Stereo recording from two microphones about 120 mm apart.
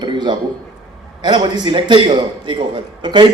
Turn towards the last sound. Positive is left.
turn(degrees=-40)  # may be behind; listen again after turning